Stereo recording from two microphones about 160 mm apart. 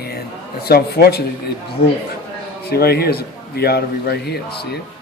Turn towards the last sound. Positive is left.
turn(degrees=90)